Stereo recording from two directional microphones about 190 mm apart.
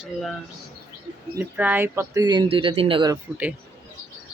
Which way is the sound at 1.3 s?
10° right (ahead or behind).